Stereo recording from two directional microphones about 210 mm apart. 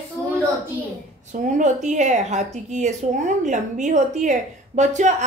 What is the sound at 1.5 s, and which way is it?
A woman's voice, 35° right (ahead or behind).